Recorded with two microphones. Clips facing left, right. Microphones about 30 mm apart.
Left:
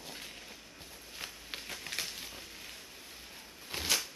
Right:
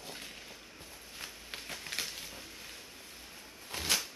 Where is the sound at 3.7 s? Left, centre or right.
Left.